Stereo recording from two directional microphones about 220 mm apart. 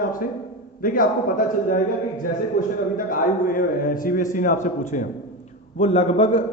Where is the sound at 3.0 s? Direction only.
40° left (ahead or behind).